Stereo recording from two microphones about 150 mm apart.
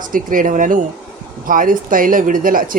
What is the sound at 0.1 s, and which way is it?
Speech, 65° right (ahead or behind).